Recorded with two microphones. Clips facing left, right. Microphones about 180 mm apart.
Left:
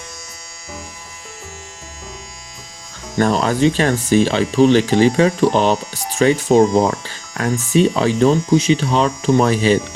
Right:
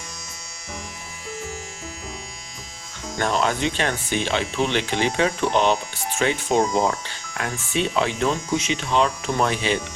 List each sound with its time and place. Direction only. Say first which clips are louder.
3.2 s speech: left 7 dB; 40° left (ahead or behind)